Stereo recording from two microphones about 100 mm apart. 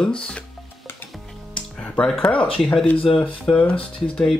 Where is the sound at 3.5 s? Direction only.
10° left (ahead or behind).